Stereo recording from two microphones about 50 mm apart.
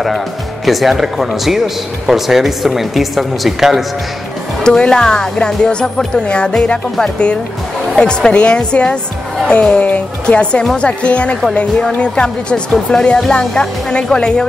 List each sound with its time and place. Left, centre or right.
0.7 s speech: centre
4.6 s speech: centre